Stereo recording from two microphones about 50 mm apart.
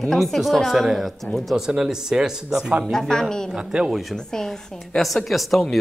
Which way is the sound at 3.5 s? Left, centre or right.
Centre.